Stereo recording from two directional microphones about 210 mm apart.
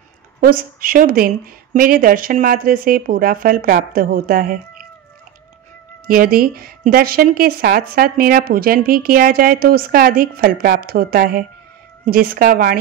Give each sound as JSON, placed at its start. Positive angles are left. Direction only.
{"t": 0.4, "sound": "a woman's voice", "side_deg": -45}
{"t": 6.0, "sound": "a woman's voice", "side_deg": -45}